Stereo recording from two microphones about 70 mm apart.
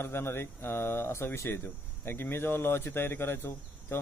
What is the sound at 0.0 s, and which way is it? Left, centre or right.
Speech, left.